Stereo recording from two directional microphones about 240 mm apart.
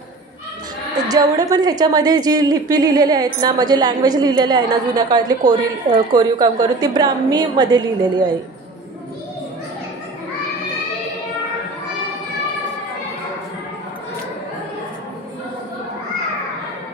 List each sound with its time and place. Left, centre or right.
0.9 s a woman's voice: centre